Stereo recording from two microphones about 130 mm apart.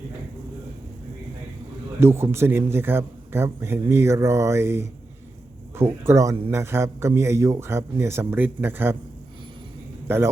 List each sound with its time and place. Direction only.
2.0 s a man's voice: 20° right (ahead or behind)